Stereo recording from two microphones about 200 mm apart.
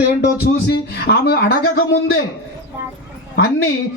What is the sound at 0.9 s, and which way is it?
A woman's voice, 55° left (ahead or behind).